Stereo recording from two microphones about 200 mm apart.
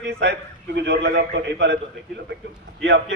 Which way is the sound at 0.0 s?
60° right (ahead or behind).